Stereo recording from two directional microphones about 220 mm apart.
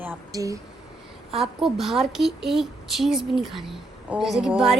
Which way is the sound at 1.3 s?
Centre (ahead or behind).